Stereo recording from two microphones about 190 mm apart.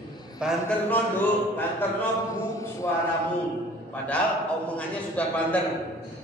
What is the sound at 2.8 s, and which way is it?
Speech, 15° left (ahead or behind).